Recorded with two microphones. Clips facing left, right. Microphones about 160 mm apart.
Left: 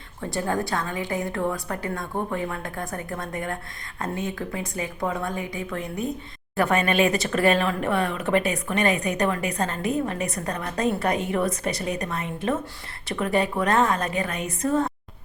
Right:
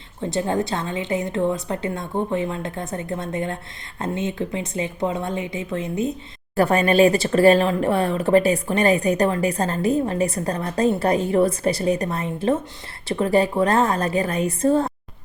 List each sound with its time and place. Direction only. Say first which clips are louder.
0.2 s a woman's voice: right 4 dB; 20° right (ahead or behind)
6.6 s speech: right 5 dB; 35° right (ahead or behind)